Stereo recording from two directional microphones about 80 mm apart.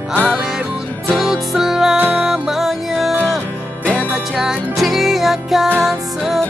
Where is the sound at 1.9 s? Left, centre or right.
Centre.